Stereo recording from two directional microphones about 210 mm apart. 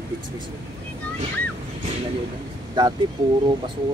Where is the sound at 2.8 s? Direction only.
20° right (ahead or behind).